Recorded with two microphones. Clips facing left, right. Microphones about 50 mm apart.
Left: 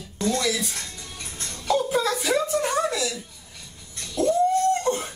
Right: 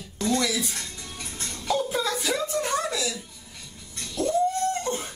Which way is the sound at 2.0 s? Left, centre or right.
Centre.